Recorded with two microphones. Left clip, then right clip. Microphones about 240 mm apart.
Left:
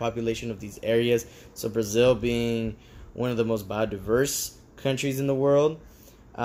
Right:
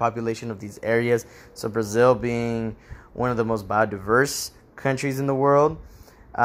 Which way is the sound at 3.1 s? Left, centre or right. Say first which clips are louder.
Right 3 dB; centre.